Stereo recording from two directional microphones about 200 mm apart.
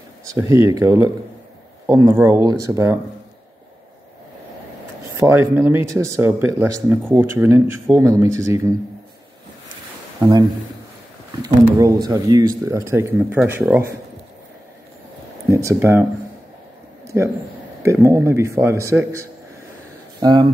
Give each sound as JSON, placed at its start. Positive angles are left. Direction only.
{"t": 0.3, "sound": "speech", "side_deg": -15}
{"t": 5.2, "sound": "speech", "side_deg": -10}
{"t": 10.2, "sound": "a man's voice", "side_deg": -20}
{"t": 11.4, "sound": "speech", "side_deg": -20}
{"t": 15.5, "sound": "speech", "side_deg": -15}
{"t": 17.8, "sound": "speech", "side_deg": -15}